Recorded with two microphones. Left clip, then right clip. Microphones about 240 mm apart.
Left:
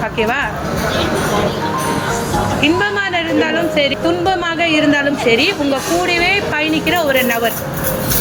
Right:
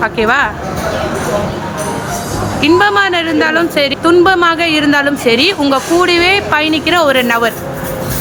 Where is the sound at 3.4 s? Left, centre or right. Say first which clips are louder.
Right 3 dB; right.